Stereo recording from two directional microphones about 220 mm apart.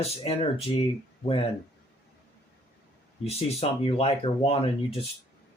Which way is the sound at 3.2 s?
25° left (ahead or behind).